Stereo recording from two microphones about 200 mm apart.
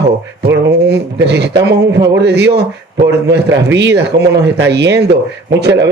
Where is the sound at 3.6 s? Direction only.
60° right (ahead or behind).